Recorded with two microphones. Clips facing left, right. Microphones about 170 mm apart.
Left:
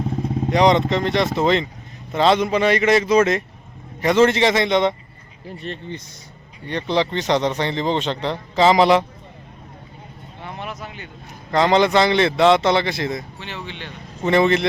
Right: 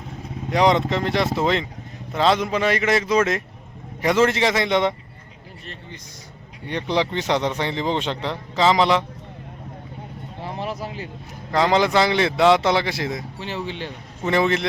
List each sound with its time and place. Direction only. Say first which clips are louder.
0.5 s speech: left 2 dB; 5° right (ahead or behind)
6.7 s a man's voice: left 2 dB; 10° right (ahead or behind); by 9.0 s 5° left (ahead or behind)
10.4 s a sound: right 3 dB; 30° right (ahead or behind)
11.5 s a man's voice: left 2 dB; 5° right (ahead or behind)
13.4 s speech: right 4 dB; 35° right (ahead or behind)
14.3 s speech: left 4 dB; 5° right (ahead or behind)